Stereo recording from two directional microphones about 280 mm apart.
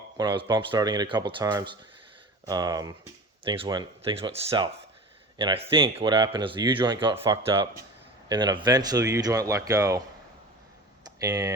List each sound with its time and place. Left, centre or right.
0.2 s speech: centre
11.0 s speech: centre